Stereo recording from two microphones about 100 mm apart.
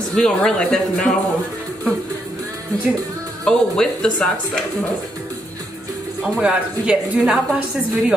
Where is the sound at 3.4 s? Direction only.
10° left (ahead or behind).